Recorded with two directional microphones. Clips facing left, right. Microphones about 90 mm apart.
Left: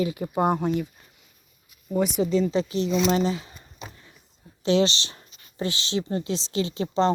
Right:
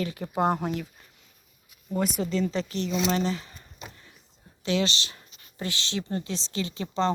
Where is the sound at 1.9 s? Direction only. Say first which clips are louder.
Left 4 dB; 5° left (ahead or behind).